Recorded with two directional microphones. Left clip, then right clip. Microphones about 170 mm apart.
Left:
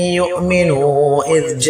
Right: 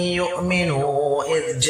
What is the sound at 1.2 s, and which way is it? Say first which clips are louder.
Speech: left 6 dB; 45° left (ahead or behind).